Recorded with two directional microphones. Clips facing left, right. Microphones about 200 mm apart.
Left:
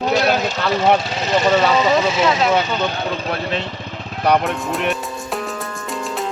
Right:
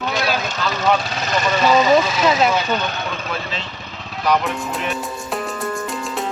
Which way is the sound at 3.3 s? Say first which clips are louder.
Left 5 dB; 60° left (ahead or behind).